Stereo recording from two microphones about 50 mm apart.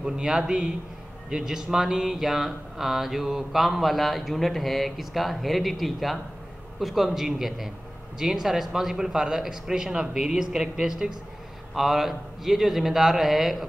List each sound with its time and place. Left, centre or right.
0.0 s a man's voice: centre